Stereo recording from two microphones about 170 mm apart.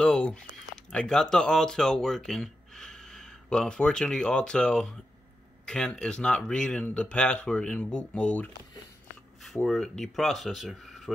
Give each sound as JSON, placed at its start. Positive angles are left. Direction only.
{"t": 0.0, "sound": "speech", "side_deg": 5}